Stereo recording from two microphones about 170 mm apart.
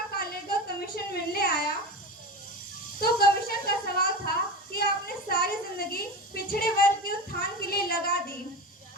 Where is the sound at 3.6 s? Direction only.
60° left (ahead or behind).